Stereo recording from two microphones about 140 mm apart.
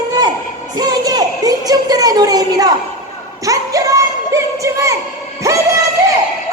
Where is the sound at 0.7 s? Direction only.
30° right (ahead or behind).